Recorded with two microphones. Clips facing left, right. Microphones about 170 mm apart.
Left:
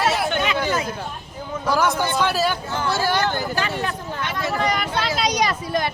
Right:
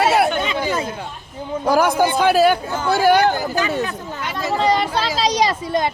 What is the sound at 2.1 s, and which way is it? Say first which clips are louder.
Speech: right 7 dB; 55° right (ahead or behind).